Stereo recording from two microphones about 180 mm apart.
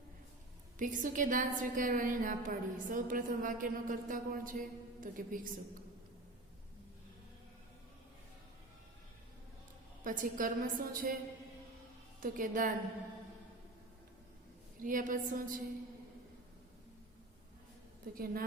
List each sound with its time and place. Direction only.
0.8 s a woman's voice: 45° right (ahead or behind)
10.0 s a woman's voice: 50° right (ahead or behind)
12.2 s a woman's voice: 50° right (ahead or behind)
14.8 s a woman's voice: 50° right (ahead or behind)
18.0 s a woman's voice: 55° right (ahead or behind)